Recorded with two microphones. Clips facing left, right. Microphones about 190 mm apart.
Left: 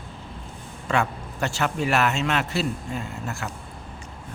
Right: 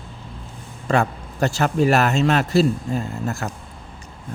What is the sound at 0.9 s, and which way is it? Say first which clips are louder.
A man's voice: right 4 dB; 40° right (ahead or behind).